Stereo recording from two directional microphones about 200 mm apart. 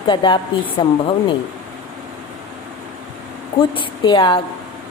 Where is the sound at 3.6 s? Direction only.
25° left (ahead or behind).